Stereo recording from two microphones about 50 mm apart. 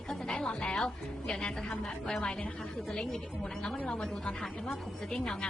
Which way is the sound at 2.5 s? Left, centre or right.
Centre.